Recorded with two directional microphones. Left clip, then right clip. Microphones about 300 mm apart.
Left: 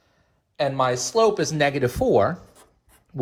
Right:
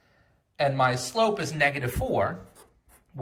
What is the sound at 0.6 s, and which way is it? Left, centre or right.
Speech, centre.